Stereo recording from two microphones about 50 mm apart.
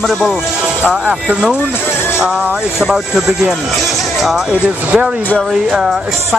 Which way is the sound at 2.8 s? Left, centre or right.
Centre.